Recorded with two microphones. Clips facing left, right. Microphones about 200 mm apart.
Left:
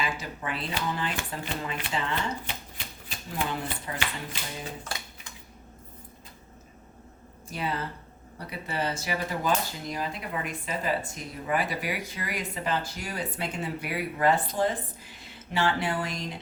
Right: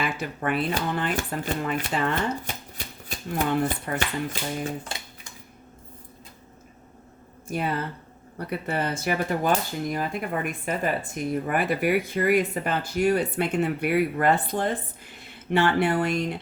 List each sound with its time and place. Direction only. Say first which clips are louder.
0.0 s speech: right 5 dB; 55° right (ahead or behind)
3.9 s finger snapping: right 7 dB; 45° right (ahead or behind)
8.4 s speech: right 4 dB; 55° right (ahead or behind)